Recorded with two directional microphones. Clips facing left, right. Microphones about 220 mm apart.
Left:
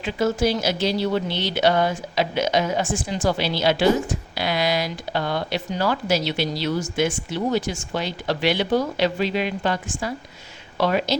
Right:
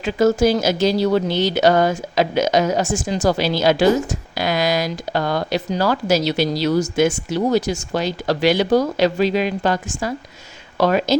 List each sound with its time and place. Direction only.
0.0 s speech: 45° right (ahead or behind)